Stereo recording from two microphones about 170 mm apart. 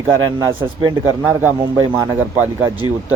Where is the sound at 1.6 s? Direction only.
15° right (ahead or behind).